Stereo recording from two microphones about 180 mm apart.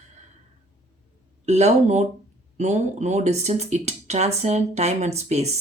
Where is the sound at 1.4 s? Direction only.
40° right (ahead or behind).